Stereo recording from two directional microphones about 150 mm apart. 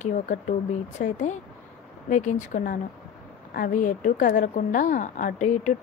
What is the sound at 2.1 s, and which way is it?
Speech, 55° left (ahead or behind).